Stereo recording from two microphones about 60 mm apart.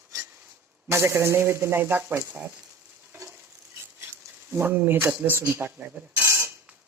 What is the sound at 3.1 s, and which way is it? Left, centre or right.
Stir, right.